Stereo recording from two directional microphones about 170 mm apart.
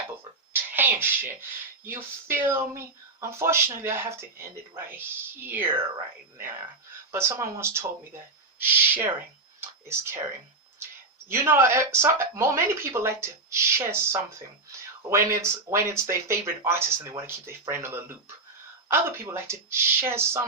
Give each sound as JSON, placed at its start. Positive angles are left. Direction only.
{"t": 0.5, "sound": "speech", "side_deg": -10}
{"t": 7.1, "sound": "speech", "side_deg": -15}